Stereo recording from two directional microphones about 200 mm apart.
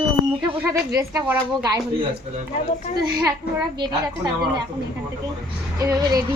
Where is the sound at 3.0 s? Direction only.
20° right (ahead or behind).